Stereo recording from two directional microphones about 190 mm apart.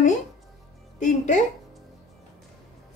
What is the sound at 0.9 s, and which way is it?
Music, 40° left (ahead or behind).